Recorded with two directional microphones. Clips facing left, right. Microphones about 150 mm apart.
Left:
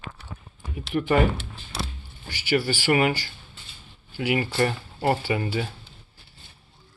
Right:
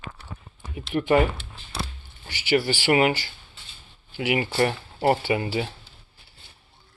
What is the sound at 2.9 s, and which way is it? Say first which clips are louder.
Speech: right 2 dB; 20° right (ahead or behind).